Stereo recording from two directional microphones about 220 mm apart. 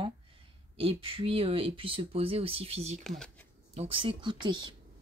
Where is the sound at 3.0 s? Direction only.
5° left (ahead or behind).